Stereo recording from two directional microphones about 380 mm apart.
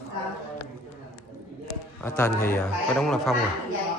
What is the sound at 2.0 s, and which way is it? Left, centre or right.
A man's voice, centre.